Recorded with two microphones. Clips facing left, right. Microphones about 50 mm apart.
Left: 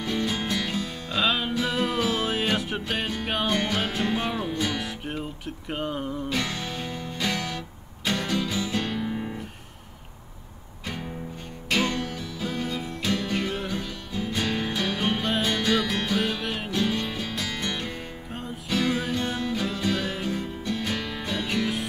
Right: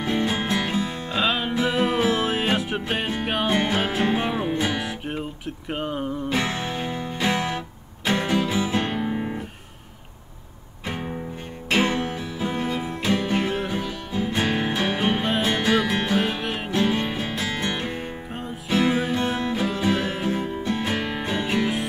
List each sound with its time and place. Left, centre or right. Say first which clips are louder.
0.0 s music: right 4 dB; right
1.2 s music: right 1 dB; centre
1.5 s music: right 4 dB; right
2.9 s music: right 2 dB; right
4.7 s guitar: right 3 dB; centre
5.7 s speech: right 2 dB; centre
6.2 s music: right 4 dB; right
10.9 s music: right 4 dB; right
16.7 s music: right 5 dB; right